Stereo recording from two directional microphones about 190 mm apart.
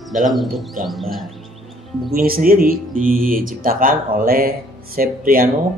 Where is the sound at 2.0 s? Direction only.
50° right (ahead or behind).